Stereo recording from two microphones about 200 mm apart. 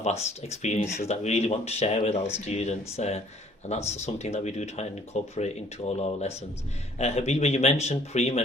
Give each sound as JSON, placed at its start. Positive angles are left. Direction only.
{"t": 0.0, "sound": "speech", "side_deg": 35}
{"t": 7.0, "sound": "speech", "side_deg": 35}